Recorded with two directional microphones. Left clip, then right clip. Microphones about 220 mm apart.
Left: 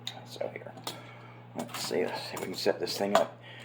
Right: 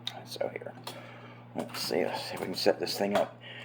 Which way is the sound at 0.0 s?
30° right (ahead or behind).